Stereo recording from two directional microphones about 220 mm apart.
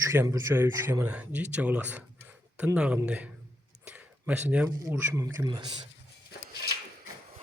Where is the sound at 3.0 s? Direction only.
5° right (ahead or behind).